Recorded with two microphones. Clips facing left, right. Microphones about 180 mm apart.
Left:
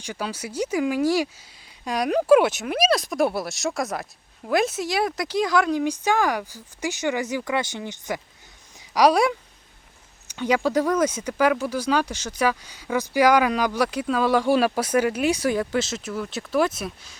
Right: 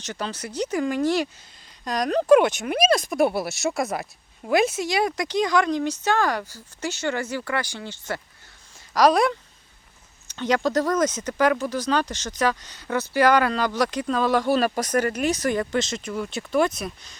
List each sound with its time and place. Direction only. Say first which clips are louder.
0.0 s speech: left 1 dB; 10° left (ahead or behind)